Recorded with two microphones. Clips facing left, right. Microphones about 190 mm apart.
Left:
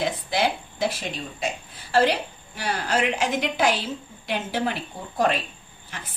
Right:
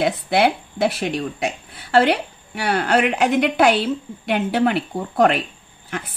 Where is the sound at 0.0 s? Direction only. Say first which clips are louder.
Right 6 dB; 65° right (ahead or behind).